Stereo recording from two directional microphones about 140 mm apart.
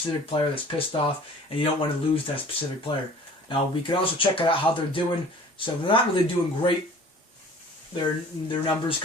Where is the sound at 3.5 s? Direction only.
40° left (ahead or behind).